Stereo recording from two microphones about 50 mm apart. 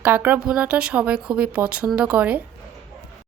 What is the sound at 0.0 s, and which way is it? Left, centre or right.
Speech, right.